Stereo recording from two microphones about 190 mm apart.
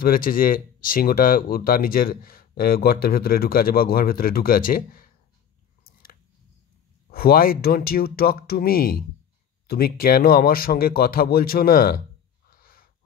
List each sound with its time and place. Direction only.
0.0 s speech: 50° left (ahead or behind)
7.1 s speech: 50° left (ahead or behind)
12.4 s a sound: 50° left (ahead or behind)